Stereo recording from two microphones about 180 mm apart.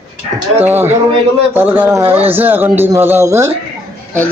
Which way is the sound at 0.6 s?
10° right (ahead or behind).